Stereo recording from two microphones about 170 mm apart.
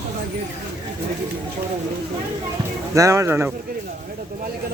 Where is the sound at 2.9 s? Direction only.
20° right (ahead or behind).